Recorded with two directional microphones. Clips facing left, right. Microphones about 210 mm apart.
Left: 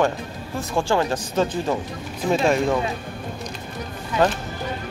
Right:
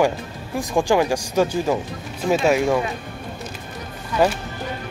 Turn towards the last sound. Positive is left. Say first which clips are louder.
# right 1 dB
turn(degrees=-10)  # may be behind; listen again after turning